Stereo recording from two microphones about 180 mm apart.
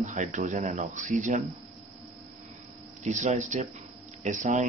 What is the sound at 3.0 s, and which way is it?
Speech, 40° right (ahead or behind).